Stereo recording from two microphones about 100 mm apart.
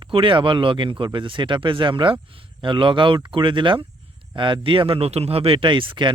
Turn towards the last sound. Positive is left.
turn(degrees=-55)  # may be behind; listen again after turning